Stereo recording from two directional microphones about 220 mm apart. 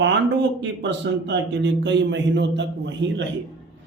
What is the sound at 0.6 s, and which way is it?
A man's voice, 50° right (ahead or behind).